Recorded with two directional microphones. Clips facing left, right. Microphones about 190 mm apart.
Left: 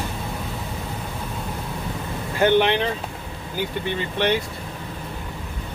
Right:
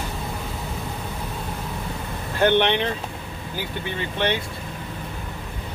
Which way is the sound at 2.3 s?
5° left (ahead or behind).